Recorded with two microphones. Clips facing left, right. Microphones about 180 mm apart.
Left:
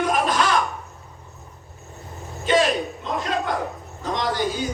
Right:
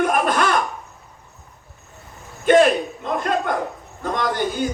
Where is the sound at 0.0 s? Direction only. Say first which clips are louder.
Right 2 dB; 55° right (ahead or behind).